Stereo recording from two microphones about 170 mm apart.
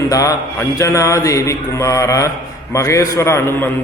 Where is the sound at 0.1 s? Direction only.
20° left (ahead or behind).